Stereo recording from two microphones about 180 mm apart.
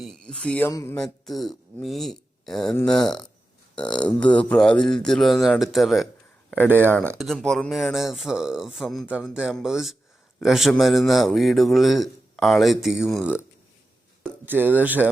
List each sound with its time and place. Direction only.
0.0 s speech: centre (ahead or behind)
0.7 s speech: 20° left (ahead or behind)
0.9 s a man's voice: centre (ahead or behind)
3.8 s speech: 25° left (ahead or behind)
4.2 s a man's voice: 5° left (ahead or behind)
6.7 s speech: 10° right (ahead or behind)
7.2 s a man's voice: centre (ahead or behind)
14.4 s speech: 10° right (ahead or behind)